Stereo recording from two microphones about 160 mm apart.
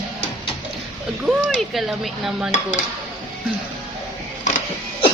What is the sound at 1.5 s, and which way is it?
Speech, centre (ahead or behind).